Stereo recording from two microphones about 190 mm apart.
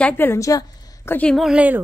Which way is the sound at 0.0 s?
10° left (ahead or behind).